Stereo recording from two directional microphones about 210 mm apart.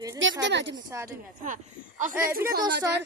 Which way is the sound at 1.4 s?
35° right (ahead or behind).